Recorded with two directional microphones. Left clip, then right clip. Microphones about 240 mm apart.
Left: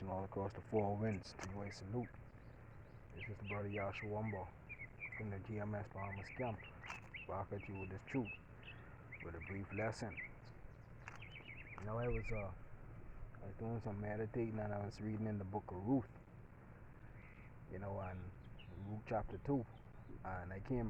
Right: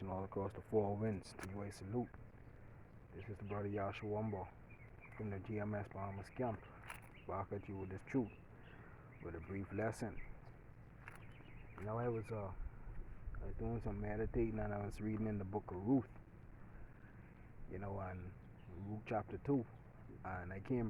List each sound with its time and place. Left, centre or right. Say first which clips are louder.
0.0 s speech: even; right
3.2 s speech: even; right
7.3 s speech: right 2 dB; right
11.8 s speech: right 2 dB; right
13.6 s speech: right 1 dB; right
17.7 s a man's voice: even; right